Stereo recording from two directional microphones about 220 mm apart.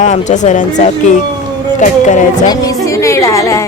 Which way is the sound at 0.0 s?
35° left (ahead or behind).